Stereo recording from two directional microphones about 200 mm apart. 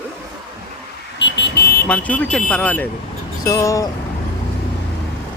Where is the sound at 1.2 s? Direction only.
55° left (ahead or behind).